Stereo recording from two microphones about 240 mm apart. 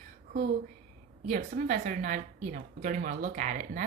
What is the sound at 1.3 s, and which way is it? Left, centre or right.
Speech, right.